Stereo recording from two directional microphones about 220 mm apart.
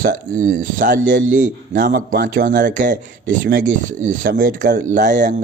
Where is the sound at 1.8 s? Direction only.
50° right (ahead or behind); by 5.3 s 35° right (ahead or behind).